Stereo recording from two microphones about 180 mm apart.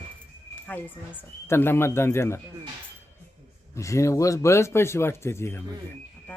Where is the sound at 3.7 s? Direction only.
15° left (ahead or behind).